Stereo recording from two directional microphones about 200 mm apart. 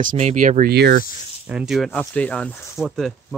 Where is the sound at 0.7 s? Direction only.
50° right (ahead or behind).